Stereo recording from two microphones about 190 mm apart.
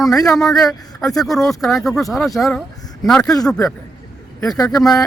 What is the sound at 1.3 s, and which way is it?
Speech, centre (ahead or behind).